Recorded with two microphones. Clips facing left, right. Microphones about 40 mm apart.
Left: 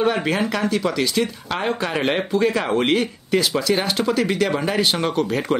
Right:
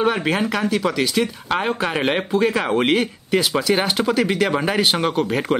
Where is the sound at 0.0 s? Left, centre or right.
Centre.